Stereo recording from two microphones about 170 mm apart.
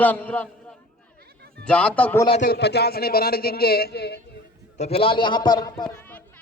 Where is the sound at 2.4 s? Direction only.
75° left (ahead or behind).